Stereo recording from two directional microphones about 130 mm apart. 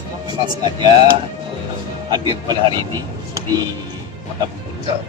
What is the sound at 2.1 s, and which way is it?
Speech, 35° right (ahead or behind).